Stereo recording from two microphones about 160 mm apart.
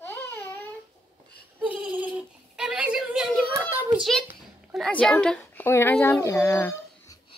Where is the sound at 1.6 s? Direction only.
10° right (ahead or behind).